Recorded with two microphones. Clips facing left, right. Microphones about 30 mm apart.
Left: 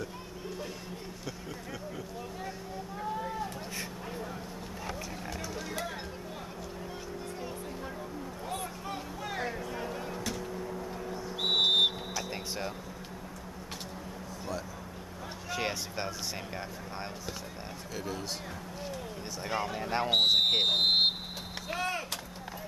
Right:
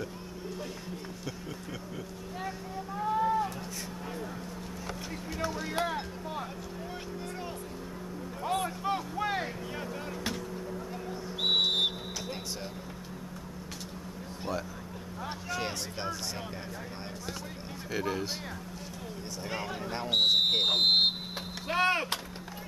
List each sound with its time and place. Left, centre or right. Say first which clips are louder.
3.1 s a sound: right 8 dB; centre
5.7 s speech: right 6 dB; right
8.5 s vehicle: right 9 dB; right
9.4 s vehicle: left 1 dB; centre
10.7 s a sound: even; centre
15.5 s speech: left 3 dB; centre
17.9 s speech: right 6 dB; right
19.5 s speech: left 4 dB; centre
21.6 s a sound: right 7 dB; right